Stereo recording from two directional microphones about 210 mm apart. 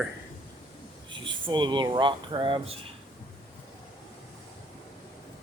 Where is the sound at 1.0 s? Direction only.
20° right (ahead or behind).